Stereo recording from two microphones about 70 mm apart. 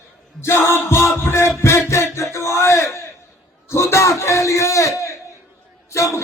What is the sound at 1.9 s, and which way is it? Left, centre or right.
Music, left.